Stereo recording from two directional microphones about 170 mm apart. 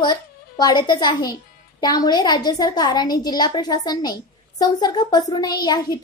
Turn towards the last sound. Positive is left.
turn(degrees=25)  # may be behind; listen again after turning